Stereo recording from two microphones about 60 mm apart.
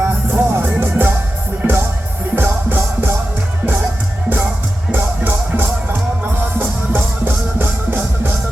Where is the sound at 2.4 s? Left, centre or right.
Right.